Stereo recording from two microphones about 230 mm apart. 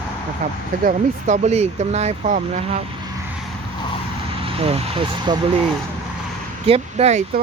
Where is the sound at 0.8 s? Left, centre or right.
Right.